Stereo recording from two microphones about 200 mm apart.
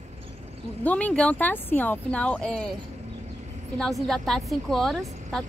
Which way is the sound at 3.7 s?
Centre (ahead or behind).